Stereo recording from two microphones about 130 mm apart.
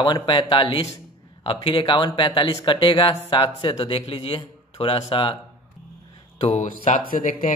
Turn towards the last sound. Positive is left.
turn(degrees=90)